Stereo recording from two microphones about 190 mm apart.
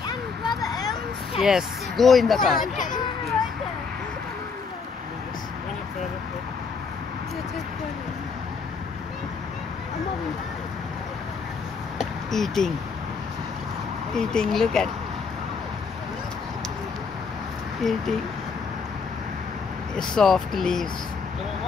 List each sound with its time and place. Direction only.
0.6 s a sound: 20° left (ahead or behind)
1.4 s speech: centre (ahead or behind)
2.6 s hubbub: 45° left (ahead or behind)
12.3 s speech: centre (ahead or behind)
14.1 s speech: 5° left (ahead or behind)
17.8 s speech: centre (ahead or behind)
20.0 s speech: centre (ahead or behind)